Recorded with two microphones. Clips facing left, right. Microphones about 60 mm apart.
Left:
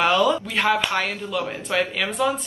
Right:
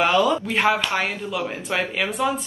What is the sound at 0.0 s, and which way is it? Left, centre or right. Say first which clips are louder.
Speech: even; centre.